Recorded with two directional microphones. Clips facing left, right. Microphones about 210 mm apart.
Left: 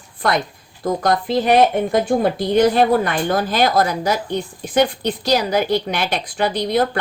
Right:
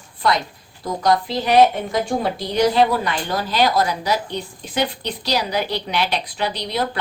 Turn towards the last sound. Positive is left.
turn(degrees=50)  # may be behind; listen again after turning